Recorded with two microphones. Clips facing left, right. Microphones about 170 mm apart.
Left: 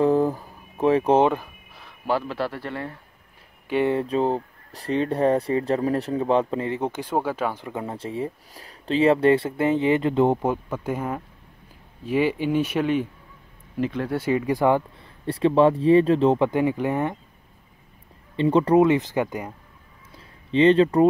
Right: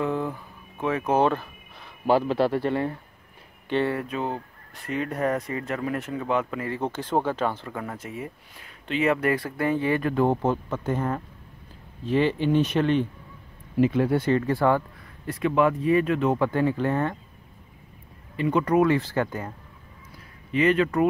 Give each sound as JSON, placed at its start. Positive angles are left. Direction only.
{"t": 0.0, "sound": "a sound", "side_deg": 40}
{"t": 1.2, "sound": "speech", "side_deg": 15}
{"t": 2.0, "sound": "speech", "side_deg": -20}
{"t": 3.6, "sound": "speech", "side_deg": 10}
{"t": 3.9, "sound": "speech", "side_deg": 30}
{"t": 13.7, "sound": "speech", "side_deg": -10}
{"t": 14.1, "sound": "speech", "side_deg": 10}
{"t": 15.2, "sound": "speech", "side_deg": 30}
{"t": 16.4, "sound": "speech", "side_deg": 15}
{"t": 18.3, "sound": "speech", "side_deg": 30}
{"t": 20.5, "sound": "speech", "side_deg": 30}